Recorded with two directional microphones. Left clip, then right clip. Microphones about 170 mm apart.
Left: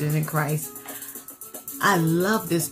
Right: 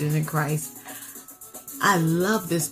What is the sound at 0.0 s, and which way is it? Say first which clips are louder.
Speech: even; 10° right (ahead or behind).